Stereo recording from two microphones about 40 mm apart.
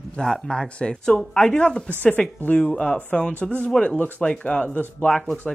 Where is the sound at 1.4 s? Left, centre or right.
Left.